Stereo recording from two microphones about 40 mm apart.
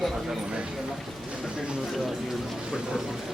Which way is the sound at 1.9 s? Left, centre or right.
Centre.